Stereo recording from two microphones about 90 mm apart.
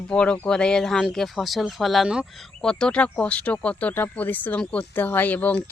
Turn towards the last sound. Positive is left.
turn(degrees=15)  # may be behind; listen again after turning